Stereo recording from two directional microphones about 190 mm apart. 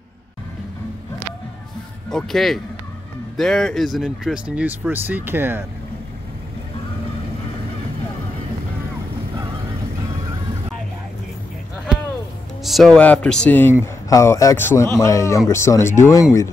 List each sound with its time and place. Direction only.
2.0 s speech: centre (ahead or behind)
12.6 s a man's voice: centre (ahead or behind); by 16.4 s 15° left (ahead or behind)